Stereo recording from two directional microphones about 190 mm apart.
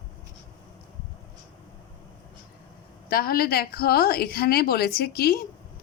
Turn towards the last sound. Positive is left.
turn(degrees=55)  # may be behind; listen again after turning